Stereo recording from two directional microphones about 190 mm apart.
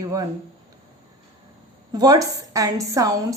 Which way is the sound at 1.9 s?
20° right (ahead or behind).